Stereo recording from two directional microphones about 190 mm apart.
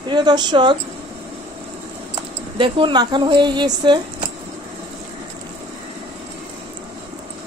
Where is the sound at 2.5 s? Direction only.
25° right (ahead or behind).